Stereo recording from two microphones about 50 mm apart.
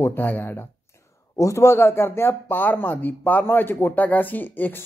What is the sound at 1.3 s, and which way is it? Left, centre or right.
Speech, left.